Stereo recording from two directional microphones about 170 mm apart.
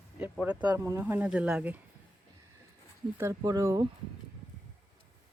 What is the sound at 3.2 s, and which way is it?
Speech, 20° right (ahead or behind).